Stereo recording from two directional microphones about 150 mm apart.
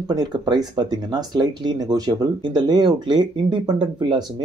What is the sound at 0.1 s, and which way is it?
Speech, 30° right (ahead or behind).